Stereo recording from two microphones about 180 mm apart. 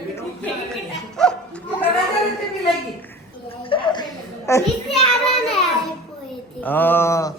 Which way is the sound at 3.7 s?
25° left (ahead or behind).